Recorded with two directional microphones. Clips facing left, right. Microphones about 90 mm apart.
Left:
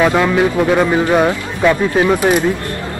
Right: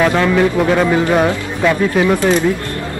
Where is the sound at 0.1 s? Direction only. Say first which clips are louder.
Even; 10° left (ahead or behind).